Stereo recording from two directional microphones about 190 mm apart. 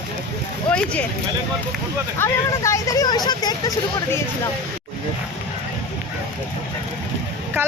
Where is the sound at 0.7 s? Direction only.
5° left (ahead or behind).